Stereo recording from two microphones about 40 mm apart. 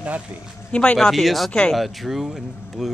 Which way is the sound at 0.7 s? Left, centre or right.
Left.